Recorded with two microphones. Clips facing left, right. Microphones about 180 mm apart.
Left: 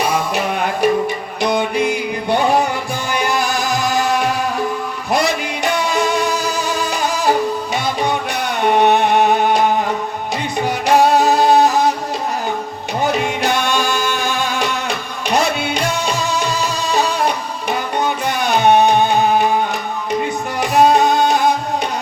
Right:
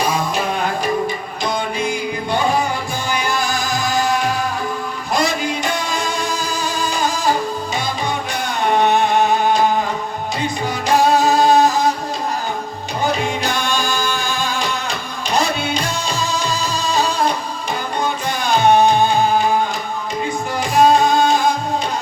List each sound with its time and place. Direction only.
0.1 s music: 60° left (ahead or behind)
8.6 s music: 60° left (ahead or behind)
10.7 s music: 60° left (ahead or behind)
13.1 s music: 60° left (ahead or behind)
20.6 s music: 65° left (ahead or behind)